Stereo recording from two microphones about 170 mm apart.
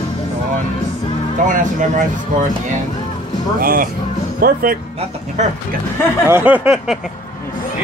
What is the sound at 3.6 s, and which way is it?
Speech, 60° right (ahead or behind).